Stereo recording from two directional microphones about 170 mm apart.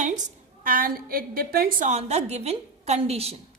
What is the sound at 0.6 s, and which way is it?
A woman's voice, 55° right (ahead or behind).